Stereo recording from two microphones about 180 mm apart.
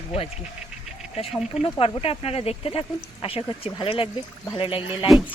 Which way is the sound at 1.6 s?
30° left (ahead or behind).